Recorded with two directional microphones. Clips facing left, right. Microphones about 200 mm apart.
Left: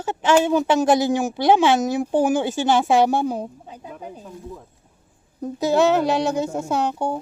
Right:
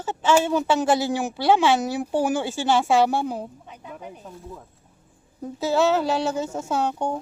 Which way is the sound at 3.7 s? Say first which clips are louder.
Left 4 dB; 30° left (ahead or behind).